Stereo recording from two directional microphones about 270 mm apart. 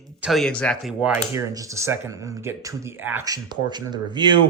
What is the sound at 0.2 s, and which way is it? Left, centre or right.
Speech, centre.